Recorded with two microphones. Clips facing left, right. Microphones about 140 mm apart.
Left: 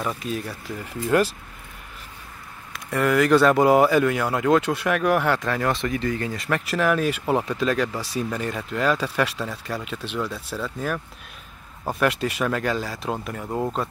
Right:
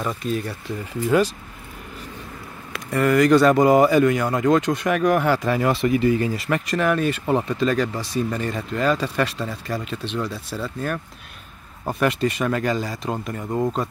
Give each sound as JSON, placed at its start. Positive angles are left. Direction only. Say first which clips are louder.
{"t": 0.0, "sound": "speech", "louder": "right 3 dB", "side_deg": 5}
{"t": 3.1, "sound": "speech", "louder": "right 2 dB", "side_deg": 0}
{"t": 9.4, "sound": "speech", "louder": "right 2 dB", "side_deg": -5}